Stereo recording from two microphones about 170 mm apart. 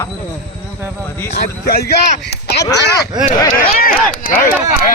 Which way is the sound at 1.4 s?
65° left (ahead or behind).